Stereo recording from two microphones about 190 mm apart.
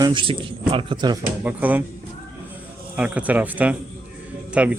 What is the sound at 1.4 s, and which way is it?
Speech, 10° right (ahead or behind).